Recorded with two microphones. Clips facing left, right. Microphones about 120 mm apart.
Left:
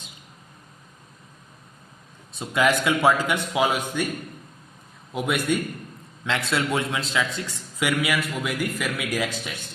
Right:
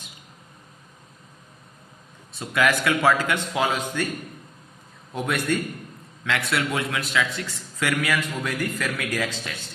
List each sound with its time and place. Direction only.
2.4 s a man's voice: 20° left (ahead or behind)
5.1 s a man's voice: 15° left (ahead or behind)